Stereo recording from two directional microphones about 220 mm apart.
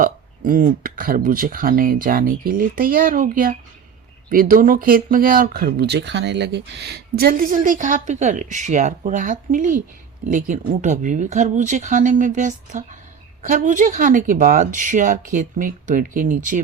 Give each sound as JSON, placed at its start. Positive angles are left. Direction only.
{"t": 0.0, "sound": "speech", "side_deg": -40}